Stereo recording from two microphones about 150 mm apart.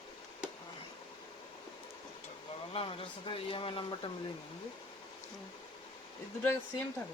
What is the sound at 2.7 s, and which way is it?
Speech, 40° left (ahead or behind).